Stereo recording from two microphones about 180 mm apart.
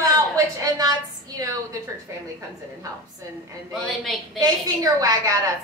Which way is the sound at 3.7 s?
Centre (ahead or behind).